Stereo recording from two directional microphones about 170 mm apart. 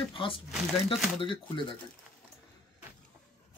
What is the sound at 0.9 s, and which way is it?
Speech, centre (ahead or behind).